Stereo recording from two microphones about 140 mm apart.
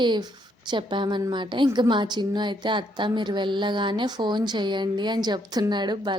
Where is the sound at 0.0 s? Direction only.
30° right (ahead or behind).